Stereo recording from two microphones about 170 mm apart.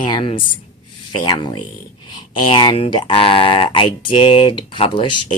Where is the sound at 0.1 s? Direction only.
30° left (ahead or behind).